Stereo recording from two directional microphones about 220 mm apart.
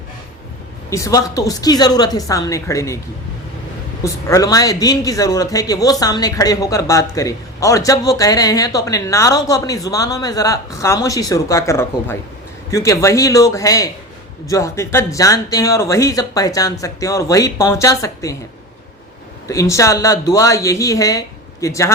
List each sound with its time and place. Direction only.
0.9 s a man's voice: 15° left (ahead or behind)
4.0 s a man's voice: 15° left (ahead or behind)
19.5 s a man's voice: 15° left (ahead or behind)